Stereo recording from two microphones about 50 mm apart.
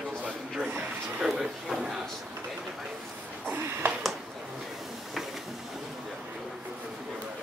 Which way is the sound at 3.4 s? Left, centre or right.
Right.